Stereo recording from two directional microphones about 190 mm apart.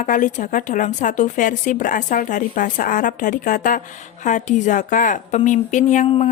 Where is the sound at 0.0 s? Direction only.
45° left (ahead or behind).